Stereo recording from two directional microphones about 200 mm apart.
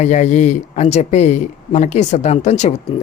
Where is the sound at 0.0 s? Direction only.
35° left (ahead or behind).